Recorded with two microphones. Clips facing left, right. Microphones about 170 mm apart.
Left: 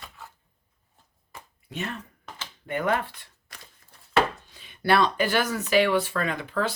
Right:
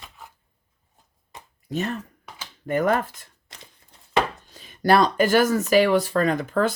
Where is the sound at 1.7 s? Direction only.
40° right (ahead or behind).